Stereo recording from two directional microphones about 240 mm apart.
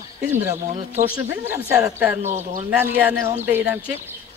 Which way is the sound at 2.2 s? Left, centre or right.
Right.